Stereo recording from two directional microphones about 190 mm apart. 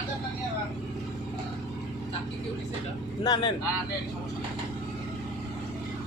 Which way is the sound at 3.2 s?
25° left (ahead or behind).